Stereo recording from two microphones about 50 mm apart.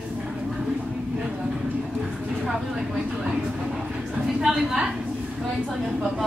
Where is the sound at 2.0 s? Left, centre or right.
Centre.